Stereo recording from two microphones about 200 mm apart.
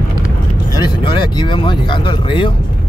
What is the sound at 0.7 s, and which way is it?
Speech, 20° left (ahead or behind).